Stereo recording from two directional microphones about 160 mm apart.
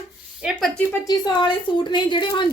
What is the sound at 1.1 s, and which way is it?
A woman's voice, 30° left (ahead or behind).